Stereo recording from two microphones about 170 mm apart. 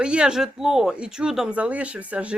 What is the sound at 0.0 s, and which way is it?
Speech, 5° right (ahead or behind).